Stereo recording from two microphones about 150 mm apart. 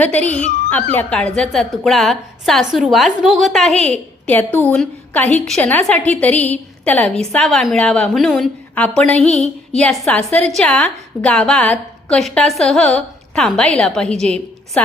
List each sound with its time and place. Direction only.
0.0 s a woman's voice: 10° left (ahead or behind)
0.3 s speech: 50° left (ahead or behind)
0.9 s a woman's voice: 5° left (ahead or behind)